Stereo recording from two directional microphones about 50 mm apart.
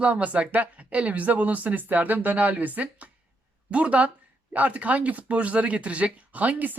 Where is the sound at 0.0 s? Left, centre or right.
Right.